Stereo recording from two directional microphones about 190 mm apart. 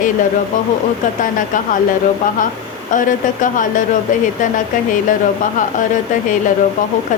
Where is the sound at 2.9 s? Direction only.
45° left (ahead or behind).